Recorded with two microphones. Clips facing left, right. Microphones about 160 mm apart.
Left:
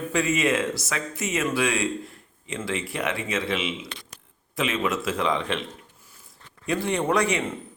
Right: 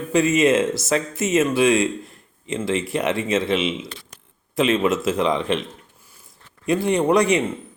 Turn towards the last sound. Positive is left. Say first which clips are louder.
# right 6 dB
turn(degrees=-15)  # may be behind; listen again after turning